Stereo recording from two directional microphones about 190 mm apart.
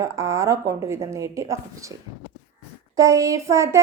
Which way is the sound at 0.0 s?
15° right (ahead or behind).